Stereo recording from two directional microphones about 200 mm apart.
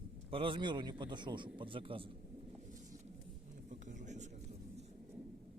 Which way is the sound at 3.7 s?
40° right (ahead or behind).